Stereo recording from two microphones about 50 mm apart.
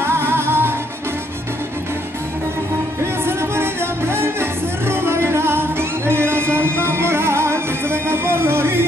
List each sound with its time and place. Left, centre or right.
0.0 s music: right
3.3 s music: right